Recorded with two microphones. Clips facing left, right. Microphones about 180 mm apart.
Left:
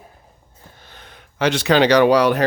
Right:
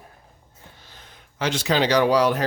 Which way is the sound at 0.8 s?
65° left (ahead or behind).